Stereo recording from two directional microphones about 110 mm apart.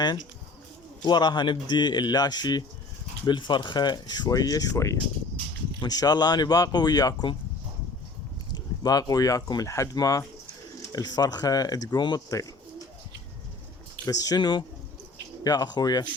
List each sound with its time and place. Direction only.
1.0 s speech: 40° left (ahead or behind)
8.5 s speech: 35° left (ahead or behind)
14.0 s speech: 35° left (ahead or behind)